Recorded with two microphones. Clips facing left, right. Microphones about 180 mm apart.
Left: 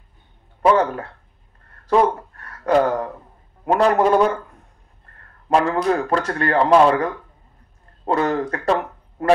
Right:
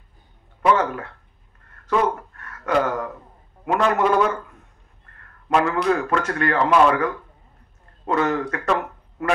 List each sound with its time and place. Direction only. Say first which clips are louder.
0.6 s a man's voice: left 3 dB; 35° left (ahead or behind)
5.5 s a man's voice: left 2 dB; 35° left (ahead or behind)